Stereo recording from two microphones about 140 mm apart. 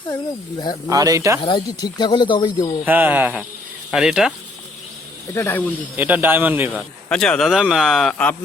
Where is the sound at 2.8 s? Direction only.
10° right (ahead or behind).